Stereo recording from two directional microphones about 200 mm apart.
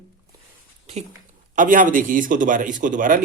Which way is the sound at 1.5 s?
40° right (ahead or behind).